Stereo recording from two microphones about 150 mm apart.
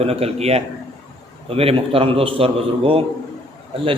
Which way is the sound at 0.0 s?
45° right (ahead or behind).